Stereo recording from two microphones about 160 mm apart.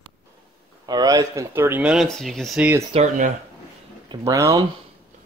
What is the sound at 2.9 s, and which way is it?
Speech, 50° right (ahead or behind).